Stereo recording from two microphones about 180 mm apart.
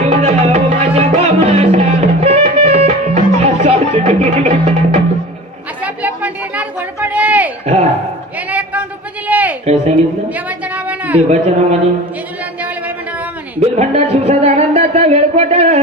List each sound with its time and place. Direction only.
0.0 s music: 35° right (ahead or behind)
5.8 s a sound: 10° right (ahead or behind)
11.3 s a man's voice: 35° right (ahead or behind)
13.6 s speech: 35° right (ahead or behind)